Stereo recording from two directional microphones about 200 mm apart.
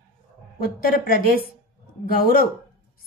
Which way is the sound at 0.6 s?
45° left (ahead or behind).